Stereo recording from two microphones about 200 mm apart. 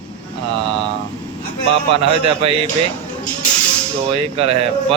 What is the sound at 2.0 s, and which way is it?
Speech, 30° right (ahead or behind).